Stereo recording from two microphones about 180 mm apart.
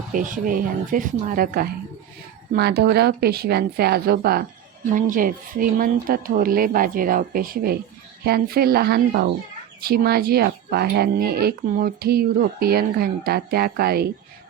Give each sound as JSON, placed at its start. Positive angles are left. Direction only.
{"t": 0.1, "sound": "speech", "side_deg": -50}